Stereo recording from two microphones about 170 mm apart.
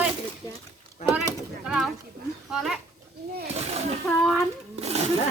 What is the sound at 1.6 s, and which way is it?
Speech, 5° right (ahead or behind).